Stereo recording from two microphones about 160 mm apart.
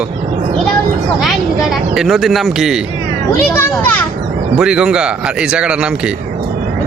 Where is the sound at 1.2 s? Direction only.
Centre (ahead or behind).